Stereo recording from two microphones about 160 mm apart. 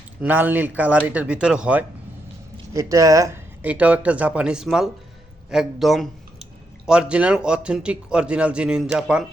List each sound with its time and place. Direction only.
0.2 s speech: 10° right (ahead or behind)
2.7 s speech: 20° right (ahead or behind)
3.6 s speech: 10° right (ahead or behind)